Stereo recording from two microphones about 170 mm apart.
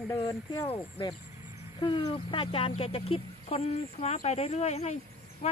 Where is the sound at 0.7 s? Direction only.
30° left (ahead or behind).